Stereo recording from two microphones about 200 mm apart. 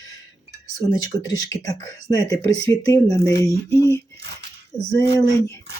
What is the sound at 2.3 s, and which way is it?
Speech, 15° left (ahead or behind).